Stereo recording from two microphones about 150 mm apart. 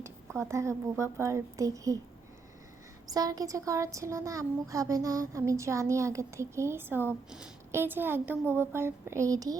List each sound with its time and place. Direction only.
0.0 s speech: 15° right (ahead or behind)
3.1 s a woman's voice: 25° right (ahead or behind)